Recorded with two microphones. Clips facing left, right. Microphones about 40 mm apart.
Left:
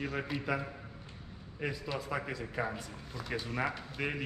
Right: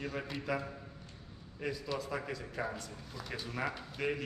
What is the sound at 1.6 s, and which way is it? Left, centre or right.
Speech, centre.